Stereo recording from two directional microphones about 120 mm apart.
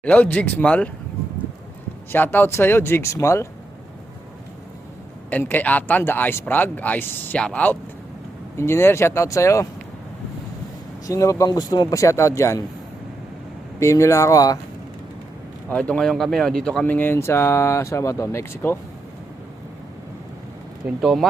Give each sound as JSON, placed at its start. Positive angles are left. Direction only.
{"t": 0.0, "sound": "speech", "side_deg": 15}
{"t": 2.1, "sound": "speech", "side_deg": 15}
{"t": 5.3, "sound": "speech", "side_deg": 15}
{"t": 11.0, "sound": "speech", "side_deg": 25}
{"t": 13.7, "sound": "speech", "side_deg": 25}
{"t": 15.7, "sound": "speech", "side_deg": 10}
{"t": 16.8, "sound": "speech", "side_deg": 15}
{"t": 21.0, "sound": "speech", "side_deg": 0}